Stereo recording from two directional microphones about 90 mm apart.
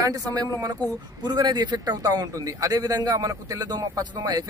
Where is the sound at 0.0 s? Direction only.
45° right (ahead or behind).